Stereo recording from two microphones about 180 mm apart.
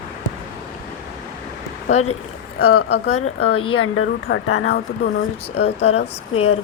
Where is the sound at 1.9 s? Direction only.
40° left (ahead or behind).